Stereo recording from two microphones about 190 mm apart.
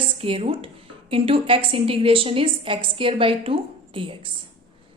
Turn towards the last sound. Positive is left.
turn(degrees=-30)  # may be behind; listen again after turning